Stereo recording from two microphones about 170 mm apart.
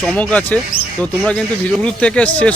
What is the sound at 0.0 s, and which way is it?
Speech, 5° left (ahead or behind).